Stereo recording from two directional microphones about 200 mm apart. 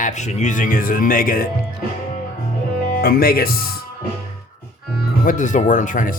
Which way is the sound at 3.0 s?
45° left (ahead or behind).